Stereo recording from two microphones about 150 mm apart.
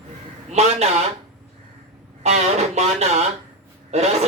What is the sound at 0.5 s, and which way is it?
Speech, 45° right (ahead or behind).